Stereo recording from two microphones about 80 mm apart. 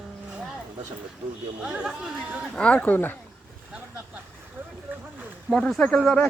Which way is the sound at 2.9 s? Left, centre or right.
Left.